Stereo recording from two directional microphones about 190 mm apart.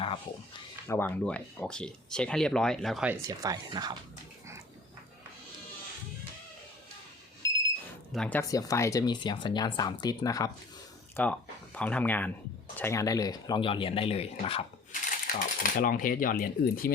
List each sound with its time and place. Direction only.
0.9 s speech: 10° left (ahead or behind)
3.2 s speech: 20° right (ahead or behind)
7.4 s alarm: 15° left (ahead or behind)
8.1 s speech: 5° left (ahead or behind)
8.4 s speech: 15° left (ahead or behind)
11.2 s speech: 5° left (ahead or behind); by 14.6 s 30° left (ahead or behind)
15.0 s speech: 45° left (ahead or behind)